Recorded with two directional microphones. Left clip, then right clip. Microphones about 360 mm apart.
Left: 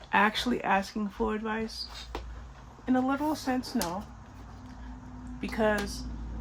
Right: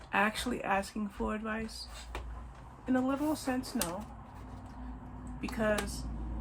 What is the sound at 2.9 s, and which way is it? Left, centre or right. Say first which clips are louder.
Speech: left 3 dB; left.